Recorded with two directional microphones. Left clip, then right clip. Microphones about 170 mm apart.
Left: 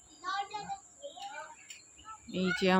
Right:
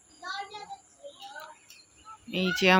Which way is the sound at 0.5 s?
40° right (ahead or behind).